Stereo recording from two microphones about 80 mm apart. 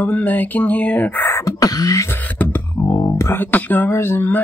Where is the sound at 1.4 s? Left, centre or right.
Left.